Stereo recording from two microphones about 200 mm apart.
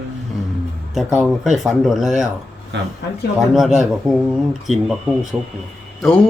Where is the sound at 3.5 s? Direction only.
Centre (ahead or behind).